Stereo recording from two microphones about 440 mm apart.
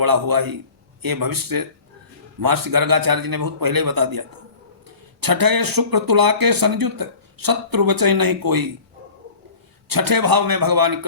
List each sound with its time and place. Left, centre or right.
0.0 s speech: right
9.9 s speech: right